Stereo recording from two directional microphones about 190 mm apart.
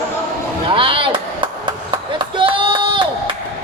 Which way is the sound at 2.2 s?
25° right (ahead or behind).